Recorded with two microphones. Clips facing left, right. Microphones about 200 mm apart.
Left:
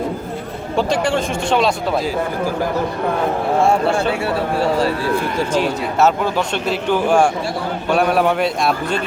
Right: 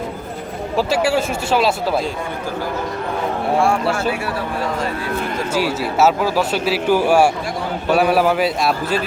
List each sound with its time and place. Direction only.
0.8 s speech: 5° right (ahead or behind)
3.6 s speech: 25° left (ahead or behind)
5.5 s a man's voice: 5° right (ahead or behind)